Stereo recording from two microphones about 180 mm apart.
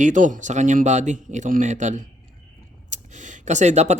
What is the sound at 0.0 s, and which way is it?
Speech, 45° right (ahead or behind).